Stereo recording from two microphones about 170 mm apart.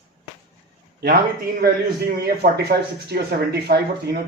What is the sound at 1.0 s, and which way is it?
Speech, 65° right (ahead or behind).